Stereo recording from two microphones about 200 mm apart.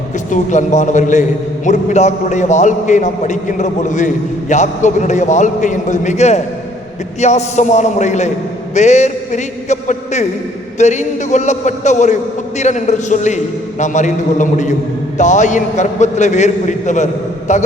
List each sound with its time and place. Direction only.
0.3 s a man's voice: 35° left (ahead or behind)